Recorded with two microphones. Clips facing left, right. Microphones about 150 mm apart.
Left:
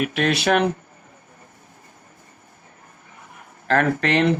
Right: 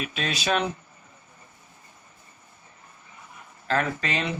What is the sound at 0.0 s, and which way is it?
Speech, 60° left (ahead or behind).